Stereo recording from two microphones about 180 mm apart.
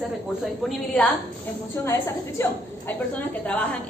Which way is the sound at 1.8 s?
15° left (ahead or behind).